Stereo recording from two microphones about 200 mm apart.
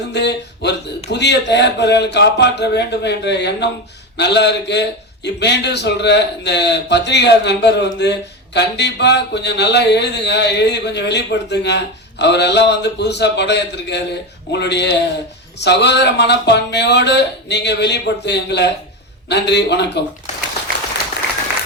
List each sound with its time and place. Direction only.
0.1 s a man's voice: 60° left (ahead or behind)